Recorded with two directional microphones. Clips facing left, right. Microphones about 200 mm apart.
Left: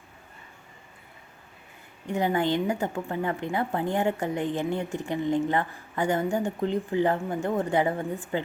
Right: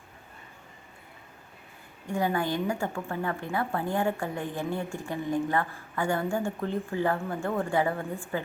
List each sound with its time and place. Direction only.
2.0 s a woman's voice: 20° left (ahead or behind)